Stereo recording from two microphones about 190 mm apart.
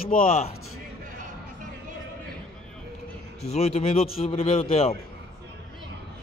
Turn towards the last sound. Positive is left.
turn(degrees=30)  # may be behind; listen again after turning